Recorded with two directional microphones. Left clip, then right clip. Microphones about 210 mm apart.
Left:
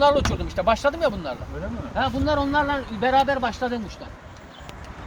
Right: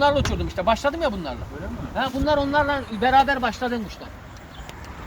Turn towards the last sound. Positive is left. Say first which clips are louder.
# right 1 dB
turn(degrees=-45)  # may be behind; listen again after turning